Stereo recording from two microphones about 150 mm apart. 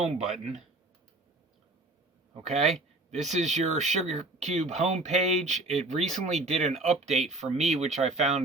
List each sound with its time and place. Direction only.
0.2 s speech: centre (ahead or behind)
2.6 s speech: centre (ahead or behind)
3.1 s speech: 50° right (ahead or behind)